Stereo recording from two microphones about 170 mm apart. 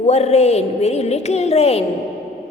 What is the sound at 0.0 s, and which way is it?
A woman's voice, 40° left (ahead or behind).